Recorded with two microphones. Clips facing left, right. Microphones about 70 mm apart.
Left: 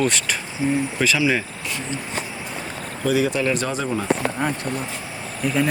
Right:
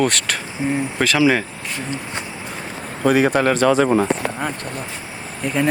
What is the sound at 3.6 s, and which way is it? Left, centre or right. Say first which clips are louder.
Speech: right 10 dB; right.